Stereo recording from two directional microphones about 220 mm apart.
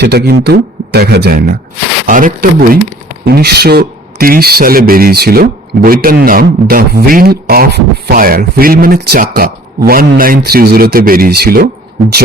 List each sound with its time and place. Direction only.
0.0 s speech: 45° right (ahead or behind)